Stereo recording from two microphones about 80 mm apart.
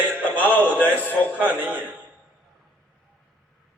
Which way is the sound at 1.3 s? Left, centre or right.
Centre.